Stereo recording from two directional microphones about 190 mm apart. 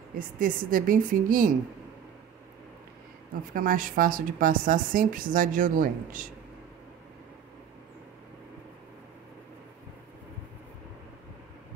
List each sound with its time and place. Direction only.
0.2 s speech: 45° right (ahead or behind)
3.5 s speech: 45° right (ahead or behind)